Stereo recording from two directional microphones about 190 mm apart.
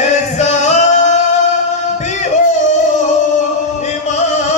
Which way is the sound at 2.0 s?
40° left (ahead or behind).